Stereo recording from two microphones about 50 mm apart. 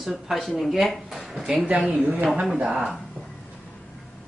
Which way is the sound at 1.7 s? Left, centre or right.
Right.